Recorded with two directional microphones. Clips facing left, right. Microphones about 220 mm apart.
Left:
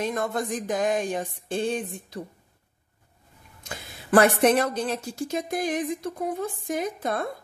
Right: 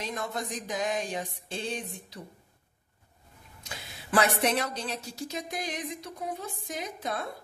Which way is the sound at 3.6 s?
50° left (ahead or behind).